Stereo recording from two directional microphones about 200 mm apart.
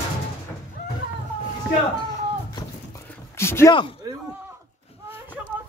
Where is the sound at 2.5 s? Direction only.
15° left (ahead or behind).